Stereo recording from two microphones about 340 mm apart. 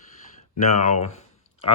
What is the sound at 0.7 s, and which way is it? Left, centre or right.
Speech, centre.